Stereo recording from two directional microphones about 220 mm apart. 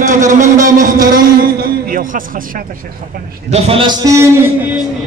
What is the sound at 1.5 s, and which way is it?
Speech, 40° right (ahead or behind).